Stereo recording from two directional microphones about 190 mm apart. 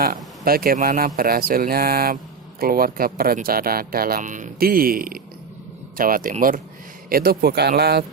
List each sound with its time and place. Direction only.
0.0 s speech: 50° right (ahead or behind)